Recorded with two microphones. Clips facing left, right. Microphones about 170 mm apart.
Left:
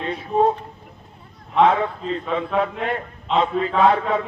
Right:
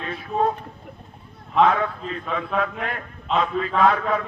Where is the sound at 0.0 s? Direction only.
25° left (ahead or behind).